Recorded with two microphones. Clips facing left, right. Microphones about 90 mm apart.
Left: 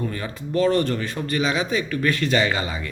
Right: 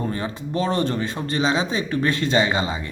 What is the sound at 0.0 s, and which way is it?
Speech, 25° right (ahead or behind).